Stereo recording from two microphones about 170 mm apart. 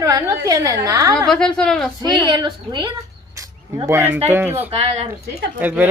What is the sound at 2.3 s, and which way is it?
Speech, 25° right (ahead or behind).